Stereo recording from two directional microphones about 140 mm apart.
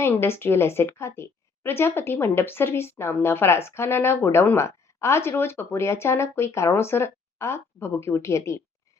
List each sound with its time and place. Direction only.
0.0 s a woman's voice: 15° left (ahead or behind)